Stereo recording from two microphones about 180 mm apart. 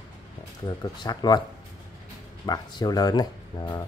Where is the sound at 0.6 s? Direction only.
25° left (ahead or behind).